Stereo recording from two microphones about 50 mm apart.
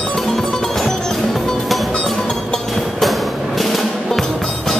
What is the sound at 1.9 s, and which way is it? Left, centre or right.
Music, centre.